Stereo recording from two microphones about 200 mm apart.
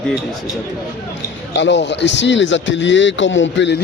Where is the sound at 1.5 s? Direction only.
65° left (ahead or behind).